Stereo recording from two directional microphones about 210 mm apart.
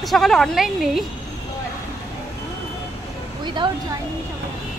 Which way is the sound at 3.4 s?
20° right (ahead or behind).